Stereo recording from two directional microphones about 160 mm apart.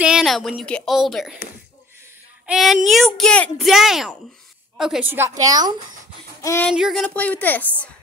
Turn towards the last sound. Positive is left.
turn(degrees=10)  # may be behind; listen again after turning